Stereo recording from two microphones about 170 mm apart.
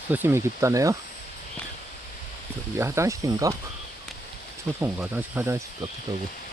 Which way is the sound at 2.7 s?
15° right (ahead or behind).